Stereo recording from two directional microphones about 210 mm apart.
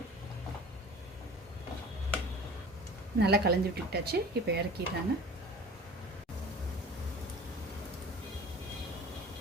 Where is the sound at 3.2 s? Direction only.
50° right (ahead or behind).